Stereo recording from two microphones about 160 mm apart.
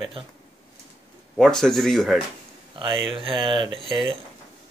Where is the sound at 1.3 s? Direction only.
5° left (ahead or behind).